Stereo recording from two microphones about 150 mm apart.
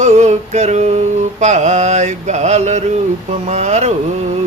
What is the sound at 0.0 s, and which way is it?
Speech, 50° right (ahead or behind).